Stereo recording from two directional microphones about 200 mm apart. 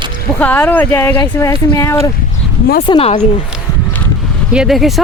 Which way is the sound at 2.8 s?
25° left (ahead or behind).